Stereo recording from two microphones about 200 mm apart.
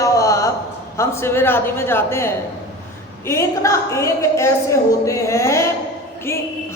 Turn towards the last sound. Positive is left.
turn(degrees=10)  # may be behind; listen again after turning